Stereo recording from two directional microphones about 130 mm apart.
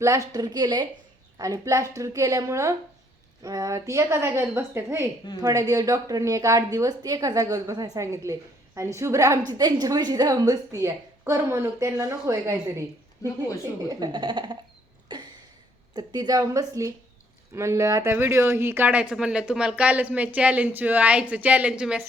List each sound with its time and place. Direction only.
0.0 s a woman's voice: 25° right (ahead or behind)
13.8 s a woman's voice: 35° right (ahead or behind)
16.0 s a woman's voice: 30° right (ahead or behind); by 22.0 s 10° right (ahead or behind)